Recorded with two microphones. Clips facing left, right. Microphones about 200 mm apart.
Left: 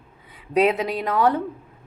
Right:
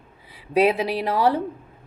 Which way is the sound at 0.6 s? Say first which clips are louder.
Right 1 dB; 10° right (ahead or behind).